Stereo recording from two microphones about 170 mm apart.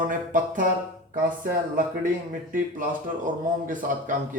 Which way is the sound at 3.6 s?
50° right (ahead or behind).